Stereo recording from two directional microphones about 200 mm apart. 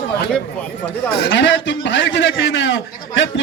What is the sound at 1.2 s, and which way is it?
A man's voice, 60° left (ahead or behind).